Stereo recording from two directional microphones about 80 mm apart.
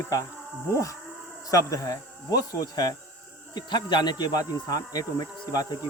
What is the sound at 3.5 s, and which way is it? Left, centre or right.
Speech, left.